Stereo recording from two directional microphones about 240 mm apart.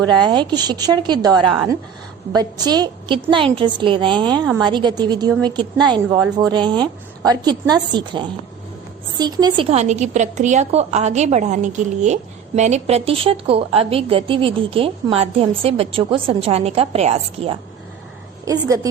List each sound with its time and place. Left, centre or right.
0.2 s a woman's voice: centre
18.4 s a woman's voice: centre